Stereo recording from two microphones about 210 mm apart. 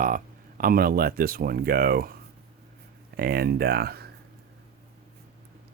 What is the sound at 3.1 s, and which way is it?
Speech, 45° right (ahead or behind).